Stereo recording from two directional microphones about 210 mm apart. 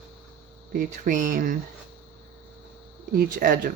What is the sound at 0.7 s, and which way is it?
Speech, 40° right (ahead or behind).